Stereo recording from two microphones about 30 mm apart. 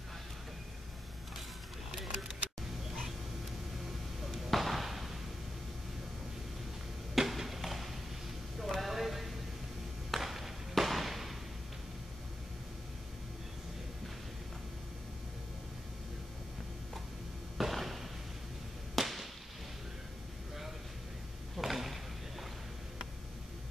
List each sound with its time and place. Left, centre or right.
4.5 s slam: centre
7.2 s a sound: centre
10.7 s fireworks: centre
17.6 s a sound: centre
18.9 s whip: centre
21.5 s drawer open or close: centre